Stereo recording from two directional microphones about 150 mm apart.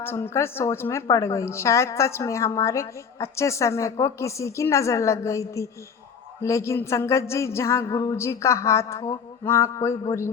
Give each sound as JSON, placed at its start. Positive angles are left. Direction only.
{"t": 0.0, "sound": "a woman's voice", "side_deg": 15}